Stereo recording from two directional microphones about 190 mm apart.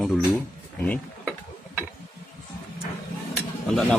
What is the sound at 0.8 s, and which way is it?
Cutlery, 10° left (ahead or behind).